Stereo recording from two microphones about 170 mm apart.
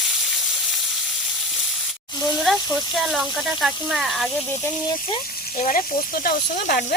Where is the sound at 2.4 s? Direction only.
Centre (ahead or behind).